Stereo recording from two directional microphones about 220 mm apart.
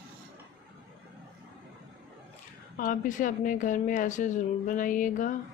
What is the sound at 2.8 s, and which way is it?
A woman's voice, 35° left (ahead or behind).